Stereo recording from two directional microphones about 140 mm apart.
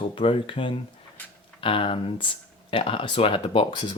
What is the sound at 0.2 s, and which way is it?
Speech, 40° left (ahead or behind).